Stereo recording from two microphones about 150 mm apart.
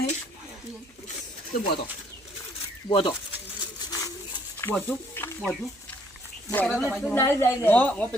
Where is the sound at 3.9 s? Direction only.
25° left (ahead or behind).